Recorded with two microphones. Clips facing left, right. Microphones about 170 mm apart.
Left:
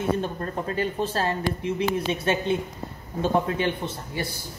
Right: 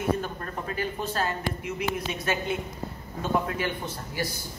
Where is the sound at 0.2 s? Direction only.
30° left (ahead or behind).